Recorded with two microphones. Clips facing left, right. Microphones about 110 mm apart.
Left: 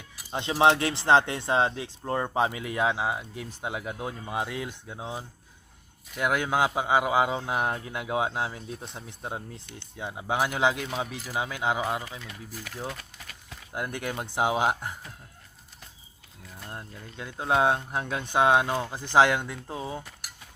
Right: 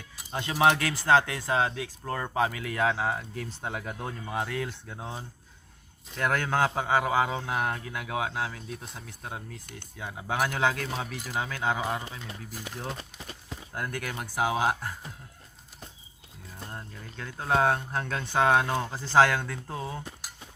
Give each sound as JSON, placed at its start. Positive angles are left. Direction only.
{"t": 0.3, "sound": "a man's voice", "side_deg": 20}
{"t": 12.5, "sound": "speech", "side_deg": -20}
{"t": 13.7, "sound": "a man's voice", "side_deg": 20}
{"t": 16.7, "sound": "speech", "side_deg": 15}